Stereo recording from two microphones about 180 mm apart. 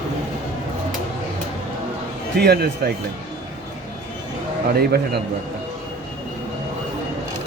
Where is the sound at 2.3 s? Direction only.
65° right (ahead or behind).